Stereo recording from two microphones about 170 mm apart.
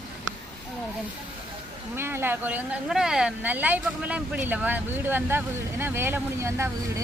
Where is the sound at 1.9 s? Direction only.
15° right (ahead or behind).